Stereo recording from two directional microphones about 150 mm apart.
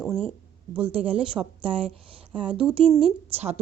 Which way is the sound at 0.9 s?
40° right (ahead or behind).